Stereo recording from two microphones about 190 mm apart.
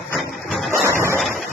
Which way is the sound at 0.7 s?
15° right (ahead or behind).